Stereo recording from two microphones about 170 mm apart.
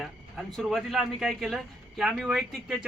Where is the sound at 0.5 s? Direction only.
Centre (ahead or behind).